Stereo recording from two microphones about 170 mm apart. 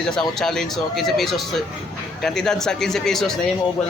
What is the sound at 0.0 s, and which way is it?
Speech, 5° left (ahead or behind).